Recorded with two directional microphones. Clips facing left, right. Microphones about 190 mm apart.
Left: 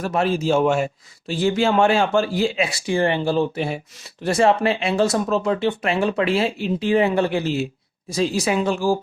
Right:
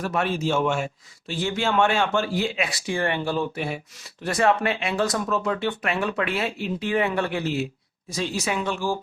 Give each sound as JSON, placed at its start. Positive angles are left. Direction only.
{"t": 0.0, "sound": "a man's voice", "side_deg": 30}